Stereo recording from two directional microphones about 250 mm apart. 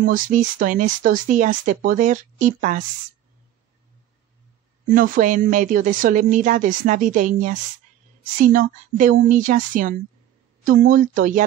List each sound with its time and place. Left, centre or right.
0.0 s speech: right
4.9 s speech: right
8.5 s speech: right